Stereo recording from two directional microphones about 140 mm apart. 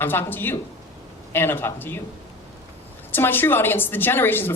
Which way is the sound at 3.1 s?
15° left (ahead or behind).